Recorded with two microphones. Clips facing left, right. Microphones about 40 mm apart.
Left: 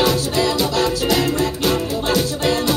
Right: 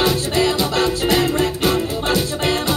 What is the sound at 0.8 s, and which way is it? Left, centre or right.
Music, right.